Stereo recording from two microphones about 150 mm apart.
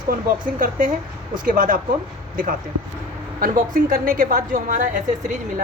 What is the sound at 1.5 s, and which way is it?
A woman's voice, 65° right (ahead or behind).